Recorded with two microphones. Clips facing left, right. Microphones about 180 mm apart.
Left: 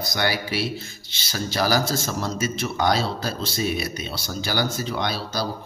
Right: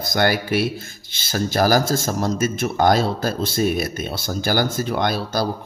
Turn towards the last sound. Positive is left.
turn(degrees=-50)  # may be behind; listen again after turning